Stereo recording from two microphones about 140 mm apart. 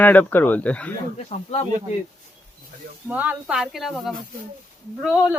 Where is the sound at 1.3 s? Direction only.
50° left (ahead or behind).